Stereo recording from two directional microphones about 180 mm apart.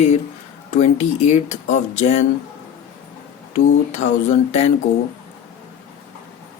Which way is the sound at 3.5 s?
40° left (ahead or behind).